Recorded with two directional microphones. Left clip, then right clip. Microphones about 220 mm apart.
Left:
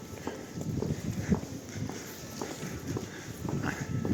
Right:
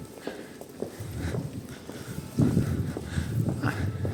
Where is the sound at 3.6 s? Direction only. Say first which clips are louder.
Right 4 dB; 15° right (ahead or behind).